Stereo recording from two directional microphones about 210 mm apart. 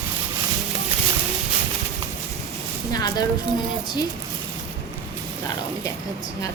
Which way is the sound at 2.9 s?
20° left (ahead or behind).